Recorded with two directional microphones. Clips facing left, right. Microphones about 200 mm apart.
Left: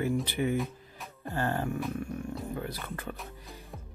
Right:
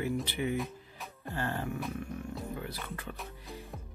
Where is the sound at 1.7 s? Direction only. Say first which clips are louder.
Left 4 dB; centre (ahead or behind).